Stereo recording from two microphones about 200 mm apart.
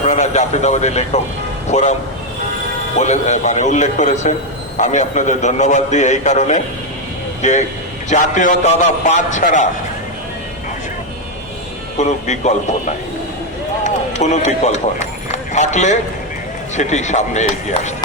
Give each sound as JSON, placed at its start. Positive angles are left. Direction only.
{"t": 0.0, "sound": "a man's voice", "side_deg": 35}
{"t": 3.0, "sound": "a man's voice", "side_deg": 35}
{"t": 11.9, "sound": "a man's voice", "side_deg": 35}
{"t": 13.8, "sound": "a man's voice", "side_deg": 35}